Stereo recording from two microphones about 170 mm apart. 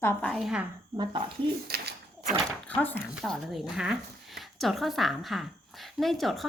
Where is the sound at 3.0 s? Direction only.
Centre (ahead or behind).